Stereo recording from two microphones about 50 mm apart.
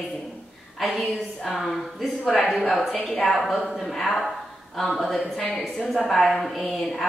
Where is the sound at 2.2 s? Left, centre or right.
Left.